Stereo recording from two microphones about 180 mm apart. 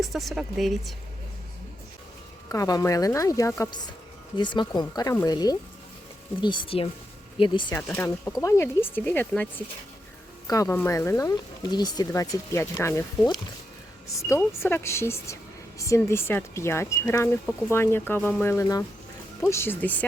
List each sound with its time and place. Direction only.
0.0 s speech: centre (ahead or behind)
2.5 s speech: 20° left (ahead or behind)
7.8 s speech: 15° left (ahead or behind)
14.3 s speech: 15° left (ahead or behind)